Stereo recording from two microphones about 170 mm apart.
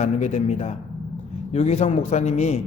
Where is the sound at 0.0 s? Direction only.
45° left (ahead or behind).